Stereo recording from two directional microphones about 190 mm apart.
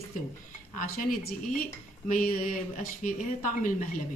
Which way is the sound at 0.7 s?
50° left (ahead or behind).